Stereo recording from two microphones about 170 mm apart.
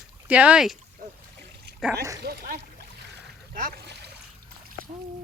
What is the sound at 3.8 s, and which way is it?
Trickle, 80° right.